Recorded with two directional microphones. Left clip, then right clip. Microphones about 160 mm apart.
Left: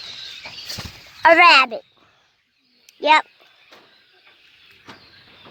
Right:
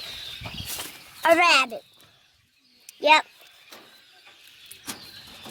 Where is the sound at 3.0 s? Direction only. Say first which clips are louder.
Left 3 dB; 50° left (ahead or behind).